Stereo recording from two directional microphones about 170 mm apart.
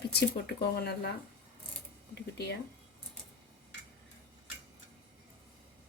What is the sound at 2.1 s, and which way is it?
Speech, 70° left (ahead or behind).